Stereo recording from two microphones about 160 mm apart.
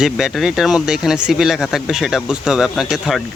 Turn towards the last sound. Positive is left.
turn(degrees=0)  # may be behind; listen again after turning